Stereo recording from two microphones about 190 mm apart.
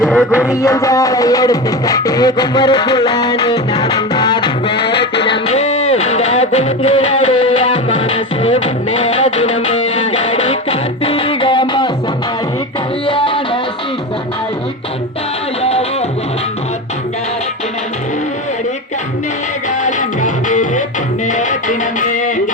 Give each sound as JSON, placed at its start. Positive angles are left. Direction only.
{"t": 0.0, "sound": "music", "side_deg": 0}
{"t": 0.5, "sound": "music", "side_deg": 15}
{"t": 4.9, "sound": "music", "side_deg": 65}
{"t": 5.2, "sound": "music", "side_deg": 30}
{"t": 13.1, "sound": "music", "side_deg": 25}
{"t": 15.6, "sound": "music", "side_deg": 30}
{"t": 19.7, "sound": "music", "side_deg": 40}